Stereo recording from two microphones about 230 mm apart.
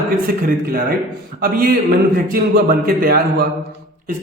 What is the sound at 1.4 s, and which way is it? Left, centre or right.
A man's voice, right.